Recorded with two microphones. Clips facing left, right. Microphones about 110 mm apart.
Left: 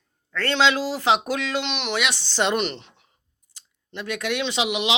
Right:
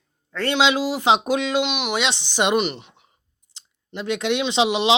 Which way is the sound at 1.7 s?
5° right (ahead or behind).